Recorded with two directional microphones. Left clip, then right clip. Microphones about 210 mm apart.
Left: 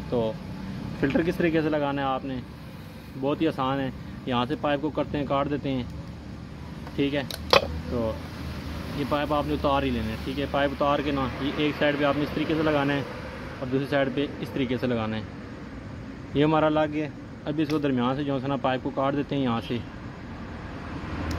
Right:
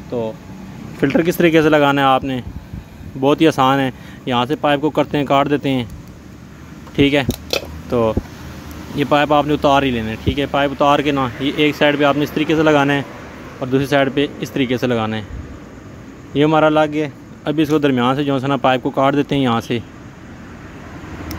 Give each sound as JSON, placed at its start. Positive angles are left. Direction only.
{"t": 0.1, "sound": "speech", "side_deg": -10}
{"t": 1.0, "sound": "speech", "side_deg": -30}
{"t": 7.0, "sound": "speech", "side_deg": -35}
{"t": 9.1, "sound": "speech", "side_deg": -30}
{"t": 16.3, "sound": "speech", "side_deg": -20}